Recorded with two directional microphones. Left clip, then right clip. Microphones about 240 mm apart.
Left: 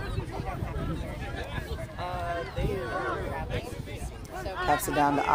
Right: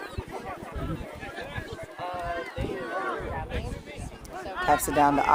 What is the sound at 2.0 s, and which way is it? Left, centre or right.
Run, left.